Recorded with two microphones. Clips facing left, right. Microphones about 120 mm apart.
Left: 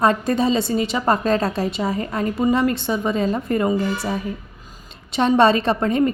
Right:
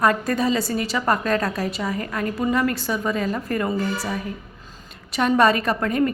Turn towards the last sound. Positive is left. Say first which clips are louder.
# left 3 dB
turn(degrees=25)  # may be behind; listen again after turning